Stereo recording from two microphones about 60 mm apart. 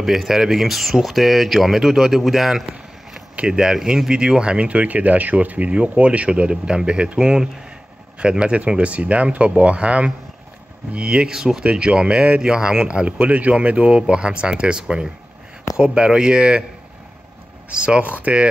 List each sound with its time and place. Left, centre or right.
0.0 s speech: centre
17.7 s speech: centre